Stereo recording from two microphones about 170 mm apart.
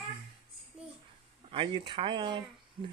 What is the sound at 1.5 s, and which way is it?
Speech, 30° right (ahead or behind).